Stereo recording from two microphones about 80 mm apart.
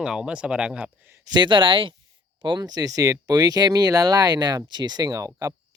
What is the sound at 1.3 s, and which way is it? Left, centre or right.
Speech, right.